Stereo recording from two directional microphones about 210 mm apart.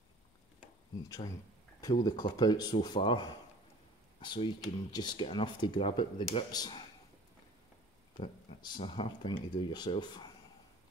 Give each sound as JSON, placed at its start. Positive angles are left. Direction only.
{"t": 1.0, "sound": "speech", "side_deg": 15}
{"t": 8.2, "sound": "speech", "side_deg": 20}